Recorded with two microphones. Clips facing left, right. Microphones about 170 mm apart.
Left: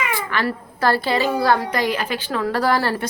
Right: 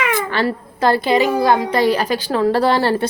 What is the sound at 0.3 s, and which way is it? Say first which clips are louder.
A woman's voice: right 4 dB; 25° right (ahead or behind).